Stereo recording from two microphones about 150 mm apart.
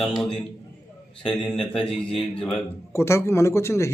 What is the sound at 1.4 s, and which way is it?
A man's voice, 5° left (ahead or behind).